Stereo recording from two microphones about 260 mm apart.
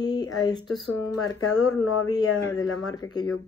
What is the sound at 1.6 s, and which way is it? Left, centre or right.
Speech, left.